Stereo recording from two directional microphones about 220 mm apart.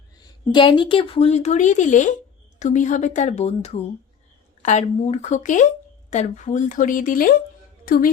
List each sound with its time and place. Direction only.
0.2 s speech: 20° left (ahead or behind); by 8.1 s 40° left (ahead or behind)